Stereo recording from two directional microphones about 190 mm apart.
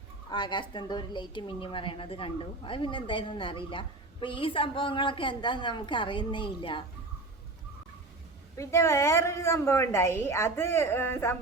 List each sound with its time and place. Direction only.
0.3 s a woman's voice: 25° left (ahead or behind)
8.5 s a woman's voice: 15° left (ahead or behind)